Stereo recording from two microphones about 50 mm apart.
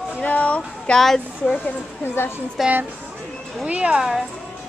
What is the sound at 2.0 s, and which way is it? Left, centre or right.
Speech, left.